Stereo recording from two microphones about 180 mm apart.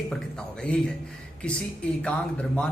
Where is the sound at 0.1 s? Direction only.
5° left (ahead or behind).